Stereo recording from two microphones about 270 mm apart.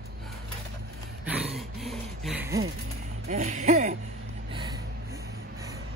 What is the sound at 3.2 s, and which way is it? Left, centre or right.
Music, right.